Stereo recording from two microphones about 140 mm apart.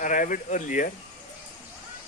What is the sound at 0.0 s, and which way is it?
Speech, 70° left (ahead or behind).